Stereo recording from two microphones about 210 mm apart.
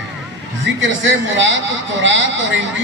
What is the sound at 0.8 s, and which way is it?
A man's voice, 65° right (ahead or behind).